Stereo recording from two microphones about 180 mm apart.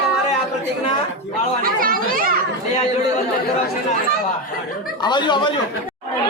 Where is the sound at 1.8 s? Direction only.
50° right (ahead or behind).